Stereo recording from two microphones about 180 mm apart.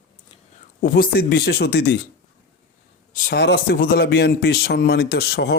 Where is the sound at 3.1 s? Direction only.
55° left (ahead or behind).